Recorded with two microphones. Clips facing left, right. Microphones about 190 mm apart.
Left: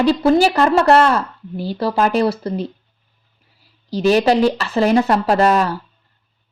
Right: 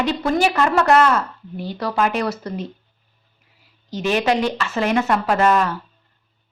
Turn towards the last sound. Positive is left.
turn(degrees=35)  # may be behind; listen again after turning